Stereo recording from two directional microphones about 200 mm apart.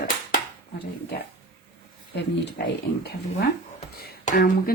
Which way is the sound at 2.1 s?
55° left (ahead or behind).